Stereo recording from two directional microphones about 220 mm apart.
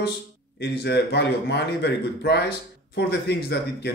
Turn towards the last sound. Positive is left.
turn(degrees=45)  # may be behind; listen again after turning